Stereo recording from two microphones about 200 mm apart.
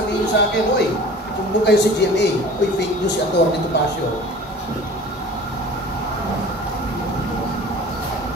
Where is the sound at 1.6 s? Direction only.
60° left (ahead or behind).